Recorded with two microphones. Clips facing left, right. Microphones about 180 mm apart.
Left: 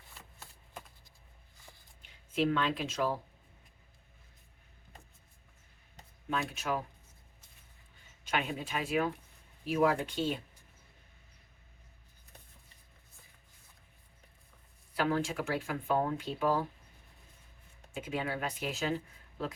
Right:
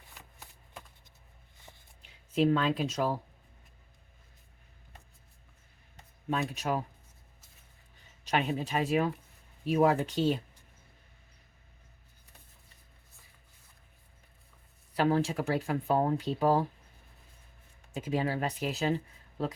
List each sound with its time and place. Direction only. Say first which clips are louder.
0.1 s shuffling cards: even; 15° right (ahead or behind)
2.0 s speech: right 4 dB; 35° right (ahead or behind)
6.3 s speech: right 3 dB; 35° right (ahead or behind)
8.2 s speech: right 4 dB; 35° right (ahead or behind)
14.9 s speech: right 4 dB; 35° right (ahead or behind)
17.9 s speech: right 5 dB; 35° right (ahead or behind)